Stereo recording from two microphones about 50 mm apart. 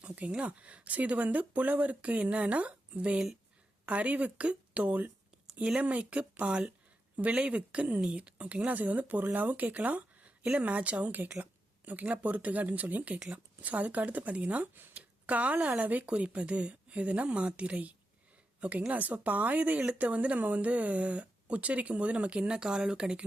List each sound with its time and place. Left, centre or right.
0.3 s speech: right